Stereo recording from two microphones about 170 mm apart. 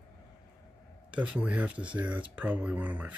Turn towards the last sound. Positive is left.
turn(degrees=-10)  # may be behind; listen again after turning